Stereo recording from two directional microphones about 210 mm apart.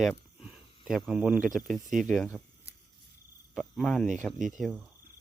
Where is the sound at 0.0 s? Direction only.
Centre (ahead or behind).